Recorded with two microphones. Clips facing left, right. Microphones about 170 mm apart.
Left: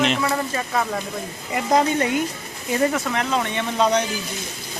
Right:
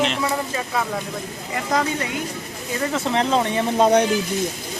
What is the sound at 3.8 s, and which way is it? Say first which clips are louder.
Speech: right 3 dB; 55° right (ahead or behind).